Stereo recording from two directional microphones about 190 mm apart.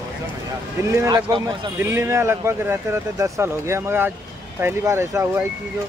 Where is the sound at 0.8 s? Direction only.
15° right (ahead or behind).